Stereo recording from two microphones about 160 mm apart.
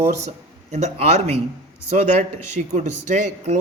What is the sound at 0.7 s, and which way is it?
A man's voice, 45° right (ahead or behind).